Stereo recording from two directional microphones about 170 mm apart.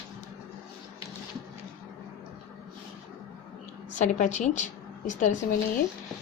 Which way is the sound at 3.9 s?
45° left (ahead or behind).